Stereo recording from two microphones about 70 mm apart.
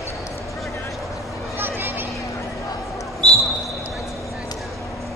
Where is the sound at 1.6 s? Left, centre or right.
Right.